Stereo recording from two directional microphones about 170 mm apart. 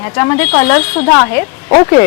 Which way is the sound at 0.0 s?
10° left (ahead or behind).